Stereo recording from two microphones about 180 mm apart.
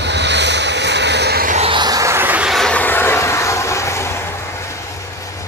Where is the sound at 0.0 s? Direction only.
75° right (ahead or behind).